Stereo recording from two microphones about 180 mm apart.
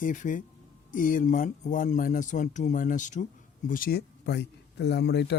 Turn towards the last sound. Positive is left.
turn(degrees=70)  # may be behind; listen again after turning